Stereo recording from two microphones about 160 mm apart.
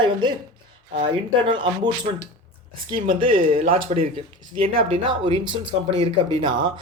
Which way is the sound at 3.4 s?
35° right (ahead or behind).